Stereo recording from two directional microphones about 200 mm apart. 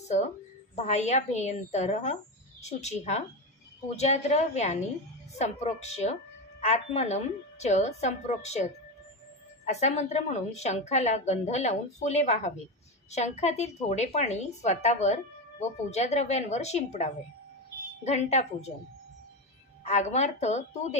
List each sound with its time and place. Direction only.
0.7 s a woman's voice: 35° left (ahead or behind)
19.8 s a woman's voice: 35° left (ahead or behind)